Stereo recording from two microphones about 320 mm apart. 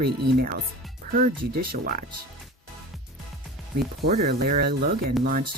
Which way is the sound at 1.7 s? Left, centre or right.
Right.